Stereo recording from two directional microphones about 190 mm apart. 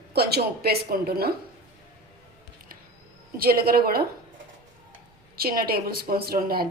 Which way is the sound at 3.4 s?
50° right (ahead or behind).